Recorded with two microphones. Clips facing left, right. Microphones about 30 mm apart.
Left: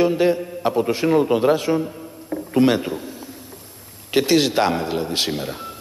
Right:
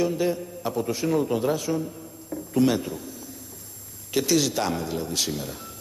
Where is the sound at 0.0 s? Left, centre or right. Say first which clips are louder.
Left 7 dB; left.